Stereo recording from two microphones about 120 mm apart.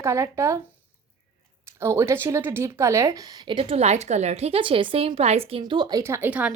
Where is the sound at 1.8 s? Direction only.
20° right (ahead or behind).